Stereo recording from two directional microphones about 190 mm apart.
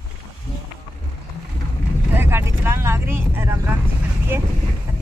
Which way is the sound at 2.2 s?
10° right (ahead or behind).